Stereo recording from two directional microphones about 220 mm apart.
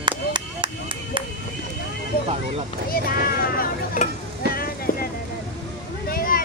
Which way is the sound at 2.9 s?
40° left (ahead or behind).